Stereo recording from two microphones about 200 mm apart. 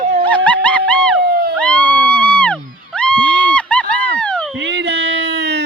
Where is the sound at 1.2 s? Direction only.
50° right (ahead or behind).